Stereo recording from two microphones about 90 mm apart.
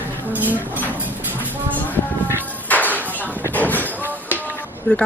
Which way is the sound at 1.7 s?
20° left (ahead or behind).